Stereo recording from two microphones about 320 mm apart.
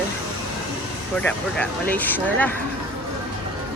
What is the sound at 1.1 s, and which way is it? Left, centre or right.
Speech, centre.